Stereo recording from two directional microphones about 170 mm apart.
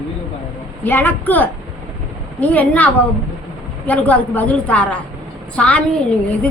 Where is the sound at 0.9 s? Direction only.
10° left (ahead or behind).